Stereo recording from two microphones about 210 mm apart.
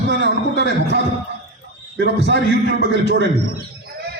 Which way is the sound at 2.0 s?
55° right (ahead or behind).